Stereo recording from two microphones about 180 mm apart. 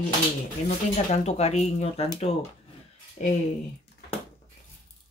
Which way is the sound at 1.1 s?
35° left (ahead or behind).